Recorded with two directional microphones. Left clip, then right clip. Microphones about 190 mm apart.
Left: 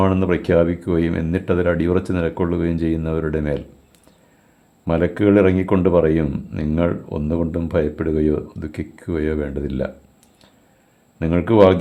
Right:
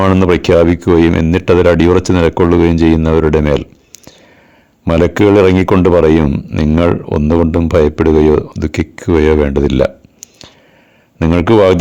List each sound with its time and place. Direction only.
0.1 s speech: 40° right (ahead or behind)
4.9 s speech: 45° right (ahead or behind)
10.2 s whispering: 40° right (ahead or behind)
11.2 s speech: 45° right (ahead or behind)